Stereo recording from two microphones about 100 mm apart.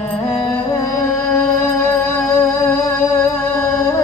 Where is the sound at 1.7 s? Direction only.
15° left (ahead or behind).